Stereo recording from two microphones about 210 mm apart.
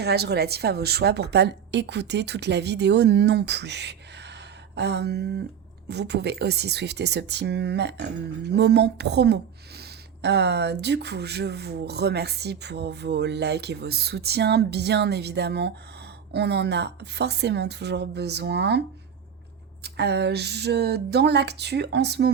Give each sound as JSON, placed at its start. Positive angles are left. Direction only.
{"t": 0.0, "sound": "speech", "side_deg": -50}
{"t": 19.8, "sound": "speech", "side_deg": -50}